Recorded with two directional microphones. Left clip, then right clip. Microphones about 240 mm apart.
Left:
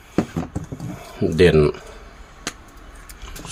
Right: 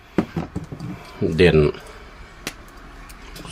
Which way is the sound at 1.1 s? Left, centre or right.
Centre.